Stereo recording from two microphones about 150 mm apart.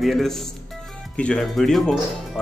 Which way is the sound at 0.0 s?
Centre (ahead or behind).